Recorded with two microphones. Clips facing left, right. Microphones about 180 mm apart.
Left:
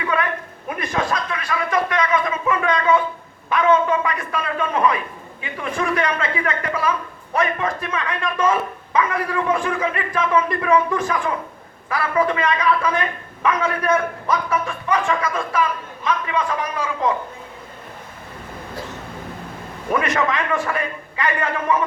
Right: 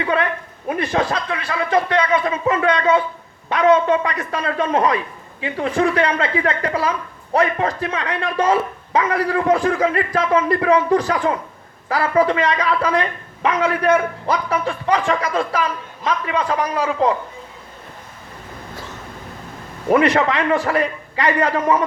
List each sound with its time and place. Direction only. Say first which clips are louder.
0.0 s a sound: right 3 dB; 30° right (ahead or behind)
0.7 s speech: right 3 dB; 30° right (ahead or behind)
3.8 s speech: right 3 dB; 35° right (ahead or behind)
19.9 s speech: right 5 dB; 35° right (ahead or behind)